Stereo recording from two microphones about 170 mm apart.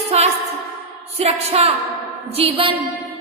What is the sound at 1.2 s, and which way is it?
A woman's voice, 35° right (ahead or behind).